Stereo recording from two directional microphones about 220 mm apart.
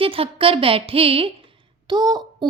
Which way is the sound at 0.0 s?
25° right (ahead or behind).